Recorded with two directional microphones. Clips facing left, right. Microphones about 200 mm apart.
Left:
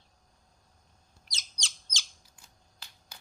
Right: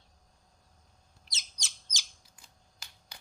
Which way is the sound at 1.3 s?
25° right (ahead or behind).